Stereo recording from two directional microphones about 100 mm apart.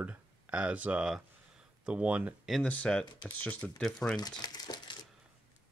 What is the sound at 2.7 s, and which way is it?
Speech, 10° left (ahead or behind).